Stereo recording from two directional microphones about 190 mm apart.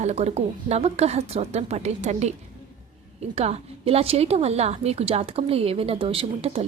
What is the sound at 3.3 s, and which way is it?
A woman's voice, 35° right (ahead or behind).